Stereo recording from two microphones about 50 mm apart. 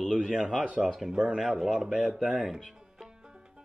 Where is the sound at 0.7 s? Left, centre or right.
Centre.